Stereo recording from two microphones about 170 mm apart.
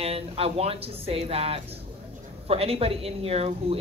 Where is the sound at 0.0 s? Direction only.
35° right (ahead or behind).